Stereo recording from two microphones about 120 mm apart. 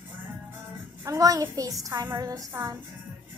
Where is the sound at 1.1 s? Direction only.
30° right (ahead or behind).